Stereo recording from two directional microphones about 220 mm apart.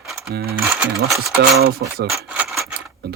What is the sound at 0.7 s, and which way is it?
Speech, 5° right (ahead or behind).